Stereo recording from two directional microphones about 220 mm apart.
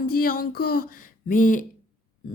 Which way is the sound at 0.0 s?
40° left (ahead or behind).